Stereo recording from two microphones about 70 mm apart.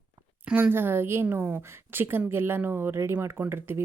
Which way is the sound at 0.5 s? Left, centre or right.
Right.